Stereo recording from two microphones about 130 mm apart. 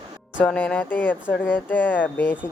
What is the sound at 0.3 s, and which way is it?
Speech, 10° left (ahead or behind).